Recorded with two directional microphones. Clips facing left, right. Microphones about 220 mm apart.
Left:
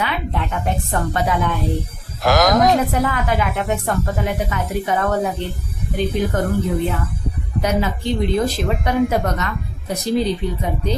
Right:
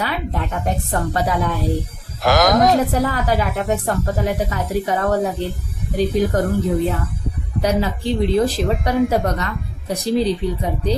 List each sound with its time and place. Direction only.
0.0 s speech: 40° right (ahead or behind)
2.2 s speech: centre (ahead or behind)
2.9 s speech: 35° right (ahead or behind)